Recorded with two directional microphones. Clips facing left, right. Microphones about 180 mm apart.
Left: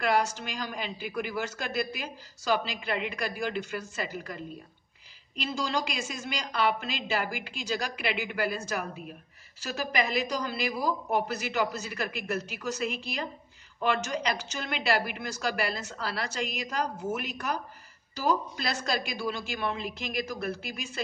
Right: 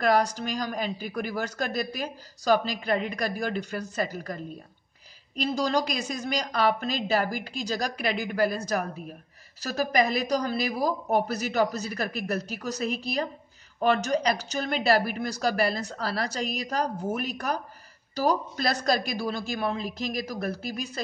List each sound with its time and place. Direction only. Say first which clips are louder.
0.0 s a woman's voice: right 4 dB; 40° right (ahead or behind)